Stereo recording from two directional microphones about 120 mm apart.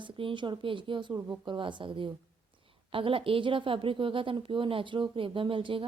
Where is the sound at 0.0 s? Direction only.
45° right (ahead or behind).